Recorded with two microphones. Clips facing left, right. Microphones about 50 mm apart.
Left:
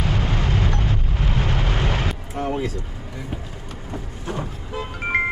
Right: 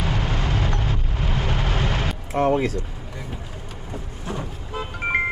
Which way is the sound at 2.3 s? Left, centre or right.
Right.